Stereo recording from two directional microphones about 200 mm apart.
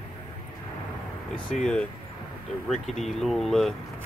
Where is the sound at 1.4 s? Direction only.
5° left (ahead or behind).